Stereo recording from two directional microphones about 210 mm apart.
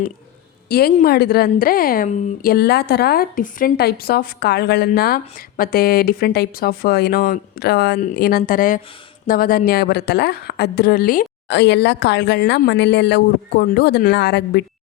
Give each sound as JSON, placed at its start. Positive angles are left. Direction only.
{"t": 0.7, "sound": "a woman's voice", "side_deg": 45}